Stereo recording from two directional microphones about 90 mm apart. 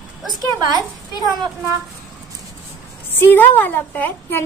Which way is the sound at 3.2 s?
20° left (ahead or behind).